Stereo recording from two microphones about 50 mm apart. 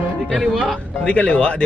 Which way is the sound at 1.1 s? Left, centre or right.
Left.